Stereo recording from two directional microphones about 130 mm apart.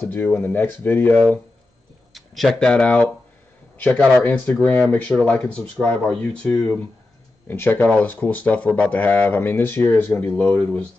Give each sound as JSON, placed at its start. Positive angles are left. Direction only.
{"t": 0.0, "sound": "speech", "side_deg": 15}
{"t": 2.1, "sound": "speech", "side_deg": 0}